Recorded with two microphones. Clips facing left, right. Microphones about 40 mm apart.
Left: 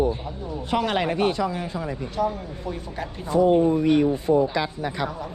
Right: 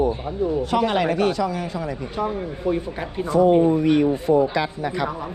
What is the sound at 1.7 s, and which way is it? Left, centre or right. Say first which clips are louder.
Speech: right 2 dB; right.